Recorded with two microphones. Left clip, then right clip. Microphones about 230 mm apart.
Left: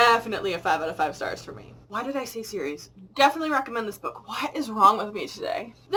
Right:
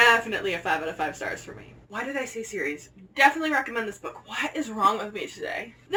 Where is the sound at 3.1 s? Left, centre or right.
Centre.